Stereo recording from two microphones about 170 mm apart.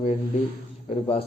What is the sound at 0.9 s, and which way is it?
Speech, 35° left (ahead or behind).